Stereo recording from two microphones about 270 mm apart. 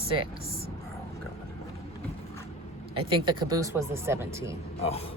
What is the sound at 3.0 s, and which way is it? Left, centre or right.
Speech, centre.